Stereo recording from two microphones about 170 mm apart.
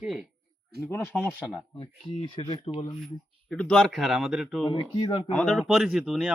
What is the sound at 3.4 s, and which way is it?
A man's voice, 5° left (ahead or behind).